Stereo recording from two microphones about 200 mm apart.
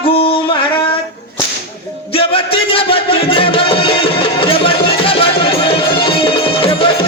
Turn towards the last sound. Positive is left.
turn(degrees=25)  # may be behind; listen again after turning